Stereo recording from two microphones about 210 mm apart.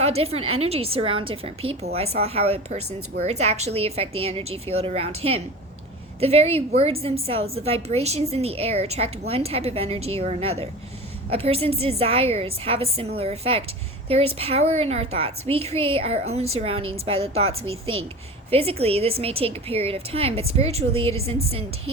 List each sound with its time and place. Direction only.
0.0 s a woman's voice: 30° right (ahead or behind)
17.7 s a woman's voice: 75° right (ahead or behind)
18.5 s a woman's voice: 30° right (ahead or behind)